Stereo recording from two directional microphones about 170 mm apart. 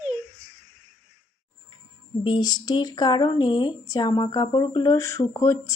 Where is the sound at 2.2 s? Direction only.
25° left (ahead or behind).